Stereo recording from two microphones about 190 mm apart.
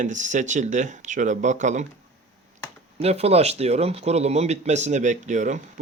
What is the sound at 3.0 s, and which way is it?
Speech, 35° right (ahead or behind).